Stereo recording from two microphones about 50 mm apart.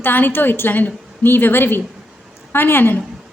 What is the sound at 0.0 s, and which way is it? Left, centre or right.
A woman's voice, left.